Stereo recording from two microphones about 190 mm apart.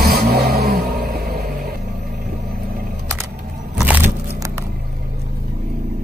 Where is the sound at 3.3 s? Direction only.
50° right (ahead or behind).